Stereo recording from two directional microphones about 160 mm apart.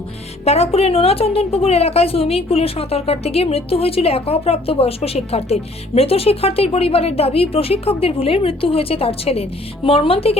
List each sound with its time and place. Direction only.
0.4 s a woman's voice: 40° left (ahead or behind)